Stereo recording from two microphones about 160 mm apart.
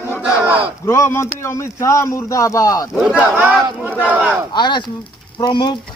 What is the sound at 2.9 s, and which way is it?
Speech, 5° right (ahead or behind).